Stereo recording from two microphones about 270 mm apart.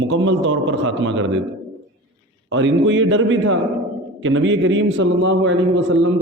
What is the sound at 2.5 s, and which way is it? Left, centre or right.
A man's voice, right.